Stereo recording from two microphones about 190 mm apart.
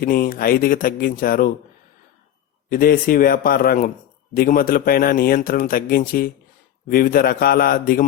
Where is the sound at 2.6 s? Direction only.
50° left (ahead or behind).